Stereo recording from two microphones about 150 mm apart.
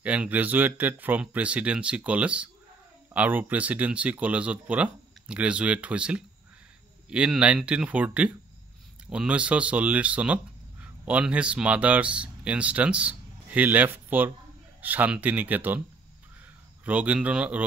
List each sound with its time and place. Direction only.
0.0 s speech: 10° right (ahead or behind)
16.8 s speech: 10° right (ahead or behind)